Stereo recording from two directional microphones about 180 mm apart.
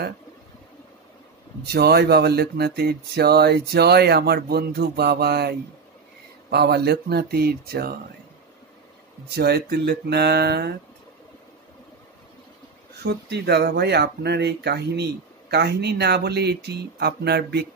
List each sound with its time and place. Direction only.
1.7 s speech: 60° right (ahead or behind)
9.3 s speech: 60° right (ahead or behind)
13.0 s speech: 65° right (ahead or behind)